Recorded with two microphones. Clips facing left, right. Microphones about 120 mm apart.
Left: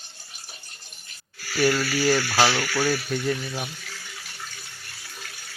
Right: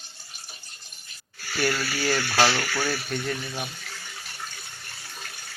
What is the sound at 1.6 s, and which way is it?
Speech, 5° left (ahead or behind).